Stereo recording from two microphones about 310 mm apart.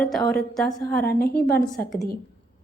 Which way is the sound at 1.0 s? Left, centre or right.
Left.